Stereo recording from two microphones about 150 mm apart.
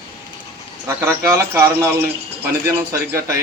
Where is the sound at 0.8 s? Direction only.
15° right (ahead or behind).